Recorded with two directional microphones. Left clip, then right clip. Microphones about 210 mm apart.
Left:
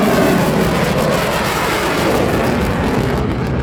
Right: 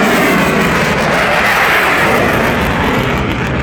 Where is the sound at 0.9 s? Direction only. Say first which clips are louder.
Right 4 dB; 60° left (ahead or behind).